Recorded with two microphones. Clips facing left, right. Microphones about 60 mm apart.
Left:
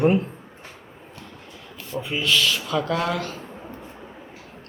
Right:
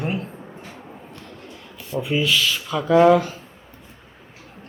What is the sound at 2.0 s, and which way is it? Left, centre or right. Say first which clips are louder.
Speech: right 2 dB; centre.